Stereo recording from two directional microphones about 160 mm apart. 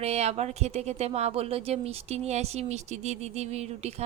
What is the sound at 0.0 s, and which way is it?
Speech, 40° right (ahead or behind).